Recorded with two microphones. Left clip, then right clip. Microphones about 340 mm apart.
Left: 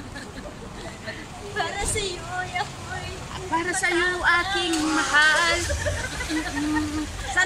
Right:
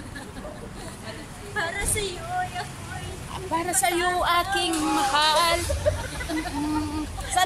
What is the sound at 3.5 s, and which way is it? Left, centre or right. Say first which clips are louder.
Speech: left 1 dB; centre.